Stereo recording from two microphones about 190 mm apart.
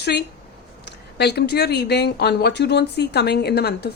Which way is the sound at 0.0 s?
60° left (ahead or behind).